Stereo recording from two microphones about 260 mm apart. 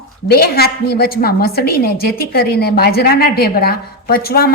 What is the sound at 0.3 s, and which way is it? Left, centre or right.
A woman's voice, left.